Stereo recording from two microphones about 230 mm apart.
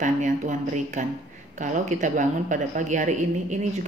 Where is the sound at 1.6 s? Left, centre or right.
Right.